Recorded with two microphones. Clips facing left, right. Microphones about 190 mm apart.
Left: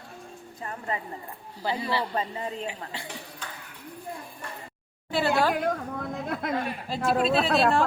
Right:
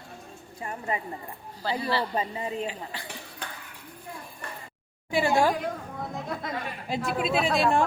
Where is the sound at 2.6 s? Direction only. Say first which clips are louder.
Right 1 dB; 20° left (ahead or behind).